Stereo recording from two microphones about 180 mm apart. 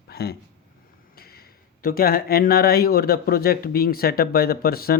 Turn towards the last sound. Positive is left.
turn(degrees=55)  # may be behind; listen again after turning